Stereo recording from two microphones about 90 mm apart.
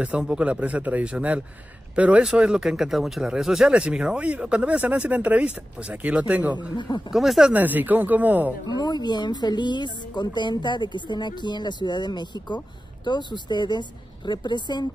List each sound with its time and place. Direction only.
0.0 s speech: 10° right (ahead or behind)
7.1 s speech: 5° right (ahead or behind)
7.5 s speech: 20° right (ahead or behind)
8.6 s speech: 50° left (ahead or behind)